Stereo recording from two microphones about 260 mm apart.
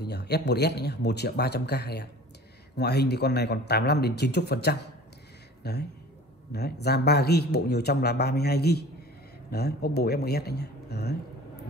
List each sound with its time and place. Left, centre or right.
0.0 s a man's voice: left